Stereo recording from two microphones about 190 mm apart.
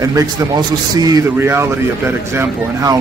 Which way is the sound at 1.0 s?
20° right (ahead or behind).